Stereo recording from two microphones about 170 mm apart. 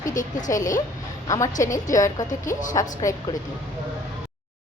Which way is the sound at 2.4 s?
50° left (ahead or behind).